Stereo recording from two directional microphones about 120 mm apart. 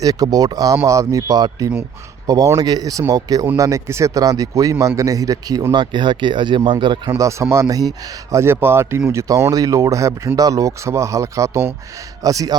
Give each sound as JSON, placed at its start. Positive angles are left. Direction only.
{"t": 0.0, "sound": "speech", "side_deg": -30}
{"t": 7.1, "sound": "speech", "side_deg": -25}